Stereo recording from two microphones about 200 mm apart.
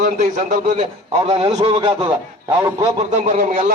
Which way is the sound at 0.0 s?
40° right (ahead or behind).